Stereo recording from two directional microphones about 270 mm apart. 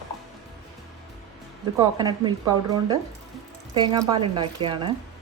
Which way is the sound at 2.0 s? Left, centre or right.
Centre.